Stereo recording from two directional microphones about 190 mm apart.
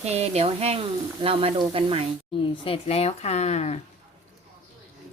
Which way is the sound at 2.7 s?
30° left (ahead or behind).